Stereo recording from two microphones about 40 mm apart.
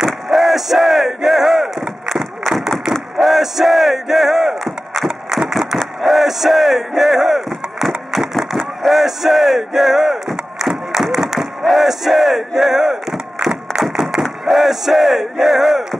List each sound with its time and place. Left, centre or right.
0.0 s artillery fire: centre
2.9 s battle cry: centre
5.9 s speech: centre
8.5 s a sound: centre
11.6 s speech: centre
13.4 s a sound: centre
14.4 s speech: centre